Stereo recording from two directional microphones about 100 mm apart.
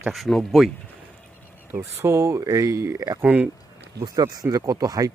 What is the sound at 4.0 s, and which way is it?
Speech, 45° right (ahead or behind).